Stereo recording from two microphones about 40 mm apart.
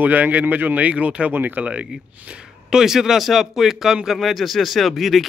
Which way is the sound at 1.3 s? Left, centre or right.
Right.